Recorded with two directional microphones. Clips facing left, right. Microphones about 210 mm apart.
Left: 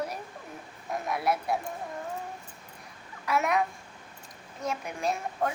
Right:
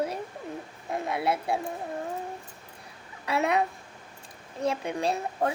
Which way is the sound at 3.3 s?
30° right (ahead or behind).